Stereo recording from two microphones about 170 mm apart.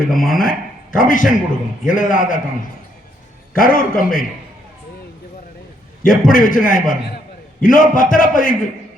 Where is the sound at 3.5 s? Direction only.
55° left (ahead or behind).